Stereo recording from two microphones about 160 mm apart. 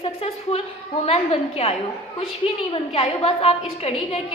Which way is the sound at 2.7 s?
40° left (ahead or behind).